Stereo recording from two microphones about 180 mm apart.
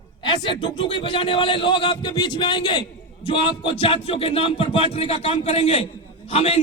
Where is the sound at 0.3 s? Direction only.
25° left (ahead or behind).